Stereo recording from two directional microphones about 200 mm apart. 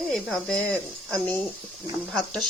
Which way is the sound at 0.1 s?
5° left (ahead or behind).